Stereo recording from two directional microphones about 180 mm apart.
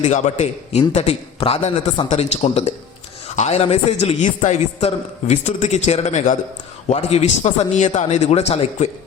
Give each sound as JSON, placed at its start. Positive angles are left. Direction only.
{"t": 0.0, "sound": "a man's voice", "side_deg": 40}